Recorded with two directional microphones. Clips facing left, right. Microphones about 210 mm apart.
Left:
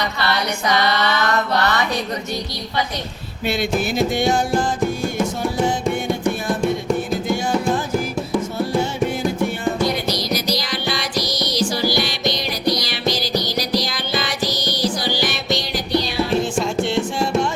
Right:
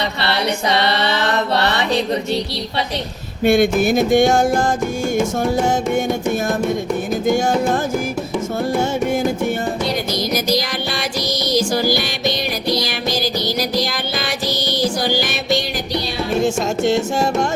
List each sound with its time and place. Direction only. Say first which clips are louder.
0.2 s mantra: right 3 dB; 30° right (ahead or behind)
3.4 s music: right 7 dB; 50° right (ahead or behind)
7.3 s music: right 9 dB; 45° right (ahead or behind)
10.1 s music: right 3 dB; 50° right (ahead or behind)
14.8 s music: right 3 dB; 45° right (ahead or behind)